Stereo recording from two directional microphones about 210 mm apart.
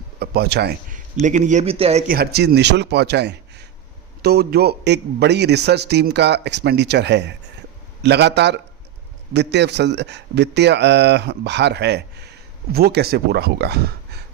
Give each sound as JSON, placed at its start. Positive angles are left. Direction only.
{"t": 0.2, "sound": "a man's voice", "side_deg": -50}
{"t": 2.0, "sound": "a man's voice", "side_deg": -50}